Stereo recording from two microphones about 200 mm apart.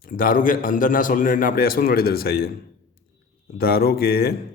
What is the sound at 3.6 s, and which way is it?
Speech, 50° left (ahead or behind).